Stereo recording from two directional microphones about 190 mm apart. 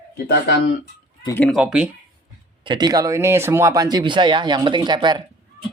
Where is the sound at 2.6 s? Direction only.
25° right (ahead or behind).